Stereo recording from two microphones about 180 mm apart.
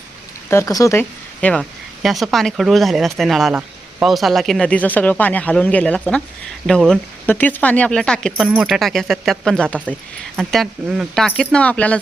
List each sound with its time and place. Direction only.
0.5 s speech: 20° left (ahead or behind)